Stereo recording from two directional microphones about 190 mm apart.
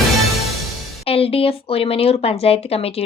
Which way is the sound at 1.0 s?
30° left (ahead or behind).